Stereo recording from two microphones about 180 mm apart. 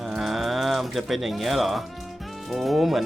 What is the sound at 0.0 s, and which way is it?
Pigeon, centre (ahead or behind).